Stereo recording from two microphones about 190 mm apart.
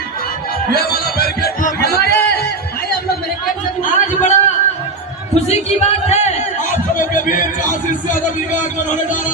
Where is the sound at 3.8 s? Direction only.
40° left (ahead or behind).